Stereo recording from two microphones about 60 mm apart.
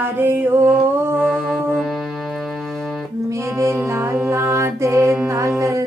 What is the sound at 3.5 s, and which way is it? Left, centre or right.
Music, right.